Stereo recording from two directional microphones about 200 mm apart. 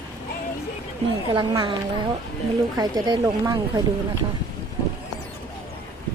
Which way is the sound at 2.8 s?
20° right (ahead or behind).